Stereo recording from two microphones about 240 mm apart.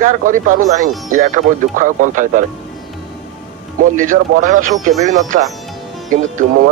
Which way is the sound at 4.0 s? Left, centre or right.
Right.